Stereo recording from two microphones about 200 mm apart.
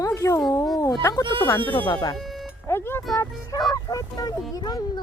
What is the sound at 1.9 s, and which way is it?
Speech, 20° left (ahead or behind).